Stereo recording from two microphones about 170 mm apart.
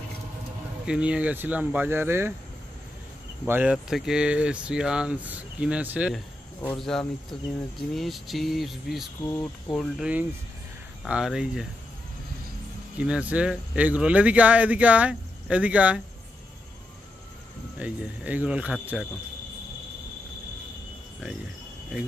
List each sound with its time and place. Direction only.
0.8 s speech: 5° right (ahead or behind)
3.4 s speech: 10° right (ahead or behind)
6.6 s speech: 5° left (ahead or behind)
9.2 s speech: 20° left (ahead or behind)
9.8 s speech: 5° right (ahead or behind)
12.9 s speech: 5° right (ahead or behind)
17.7 s speech: 10° right (ahead or behind)